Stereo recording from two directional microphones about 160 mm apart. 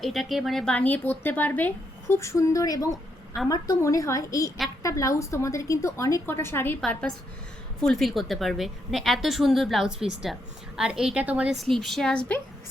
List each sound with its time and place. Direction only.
0.0 s a woman's voice: centre (ahead or behind)
7.8 s a woman's voice: 5° left (ahead or behind)